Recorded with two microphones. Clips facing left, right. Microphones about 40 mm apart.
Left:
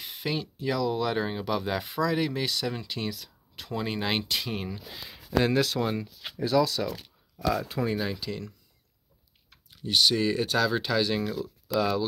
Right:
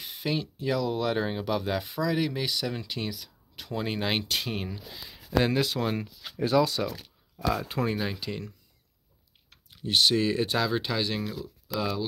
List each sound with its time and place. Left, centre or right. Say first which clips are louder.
0.0 s speech: right 1 dB; centre
6.4 s speech: even; right
7.3 s speech: left 1 dB; centre
7.6 s speech: even; right
7.9 s speech: left 1 dB; centre
8.2 s speech: even; right
9.7 s speech: even; right
10.2 s speech: left 1 dB; centre
11.7 s speech: left 5 dB; centre